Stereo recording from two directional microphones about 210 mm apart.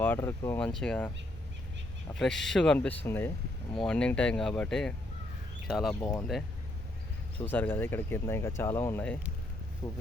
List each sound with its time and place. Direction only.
0.0 s speech: 10° left (ahead or behind)
2.1 s speech: 5° left (ahead or behind)
5.9 s speech: 15° left (ahead or behind)
7.4 s speech: 10° left (ahead or behind)
9.8 s speech: 25° left (ahead or behind)